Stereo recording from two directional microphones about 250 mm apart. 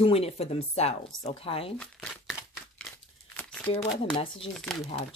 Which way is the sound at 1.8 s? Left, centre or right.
Centre.